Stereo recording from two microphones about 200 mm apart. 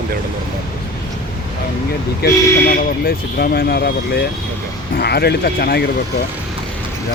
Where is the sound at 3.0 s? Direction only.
50° left (ahead or behind).